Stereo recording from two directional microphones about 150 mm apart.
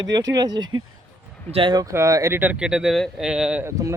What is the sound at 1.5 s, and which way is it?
Speech, 35° right (ahead or behind).